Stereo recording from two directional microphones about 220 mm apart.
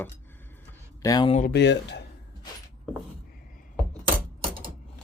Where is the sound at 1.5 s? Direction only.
50° left (ahead or behind).